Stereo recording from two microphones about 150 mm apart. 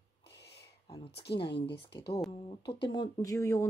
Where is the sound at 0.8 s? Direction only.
40° left (ahead or behind).